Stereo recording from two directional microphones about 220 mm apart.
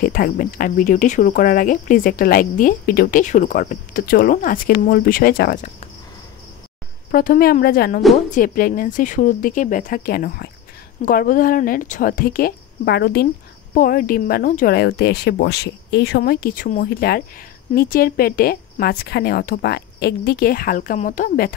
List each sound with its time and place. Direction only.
0.0 s speech: 40° left (ahead or behind)
7.1 s a woman's voice: 40° left (ahead or behind)